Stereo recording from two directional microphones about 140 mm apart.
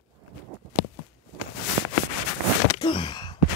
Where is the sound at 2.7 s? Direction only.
35° left (ahead or behind).